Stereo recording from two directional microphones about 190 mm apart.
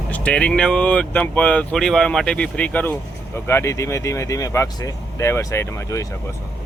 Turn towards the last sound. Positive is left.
turn(degrees=15)  # may be behind; listen again after turning